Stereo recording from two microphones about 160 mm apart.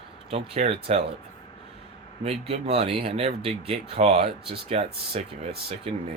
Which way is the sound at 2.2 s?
40° right (ahead or behind).